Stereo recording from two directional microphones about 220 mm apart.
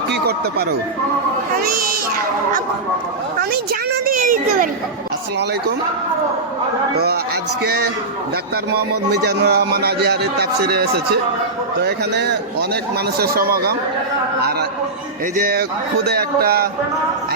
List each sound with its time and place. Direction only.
0.1 s a sound: 45° right (ahead or behind)
1.6 s a child's voice: 40° right (ahead or behind)
4.0 s a child's voice: 40° right (ahead or behind)
7.6 s a man's voice: 45° right (ahead or behind)
9.2 s a man's voice: 50° right (ahead or behind)
15.4 s a child's voice: 40° right (ahead or behind)